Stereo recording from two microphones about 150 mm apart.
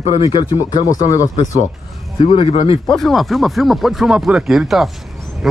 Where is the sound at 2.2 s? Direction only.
40° left (ahead or behind).